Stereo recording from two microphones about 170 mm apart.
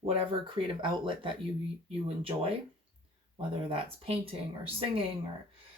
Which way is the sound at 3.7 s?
35° right (ahead or behind).